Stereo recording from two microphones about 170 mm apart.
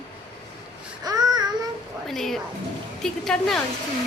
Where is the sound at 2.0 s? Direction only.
Centre (ahead or behind).